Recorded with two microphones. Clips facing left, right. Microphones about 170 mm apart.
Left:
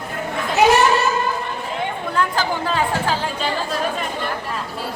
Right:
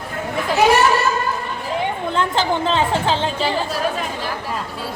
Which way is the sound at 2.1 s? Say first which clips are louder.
Right 1 dB; 25° right (ahead or behind).